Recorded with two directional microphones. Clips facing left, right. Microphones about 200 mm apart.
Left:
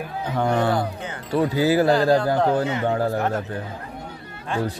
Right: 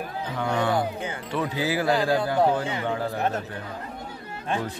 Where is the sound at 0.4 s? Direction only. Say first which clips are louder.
Left 3 dB; 40° left (ahead or behind).